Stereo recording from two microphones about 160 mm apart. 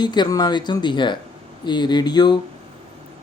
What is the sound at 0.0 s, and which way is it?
Speech, 25° left (ahead or behind).